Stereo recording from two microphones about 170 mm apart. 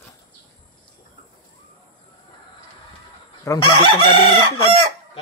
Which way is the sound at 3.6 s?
35° left (ahead or behind).